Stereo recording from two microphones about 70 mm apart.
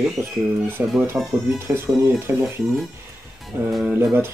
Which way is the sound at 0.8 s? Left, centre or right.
Right.